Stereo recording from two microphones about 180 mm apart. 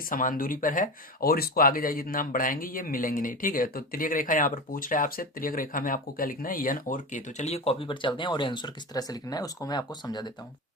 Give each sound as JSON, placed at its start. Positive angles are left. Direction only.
{"t": 0.1, "sound": "speech", "side_deg": 50}